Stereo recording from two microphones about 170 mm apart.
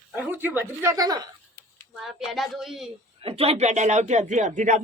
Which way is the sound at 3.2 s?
35° right (ahead or behind).